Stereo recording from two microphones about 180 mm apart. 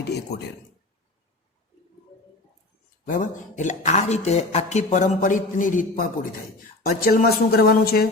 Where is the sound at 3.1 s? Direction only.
45° left (ahead or behind).